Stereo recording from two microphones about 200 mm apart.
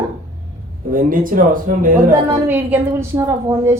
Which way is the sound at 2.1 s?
10° right (ahead or behind).